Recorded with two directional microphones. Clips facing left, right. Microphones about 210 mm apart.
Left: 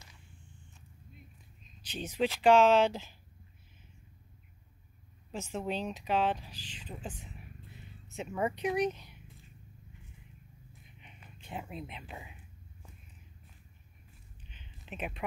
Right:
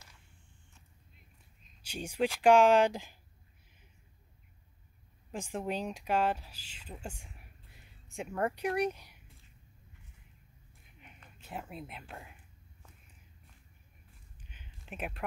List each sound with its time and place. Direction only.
1.8 s speech: 10° right (ahead or behind)
5.3 s speech: 15° right (ahead or behind)
8.3 s speech: centre (ahead or behind)
8.5 s speech: 10° right (ahead or behind)
11.4 s speech: centre (ahead or behind)
14.5 s a sound: 10° right (ahead or behind)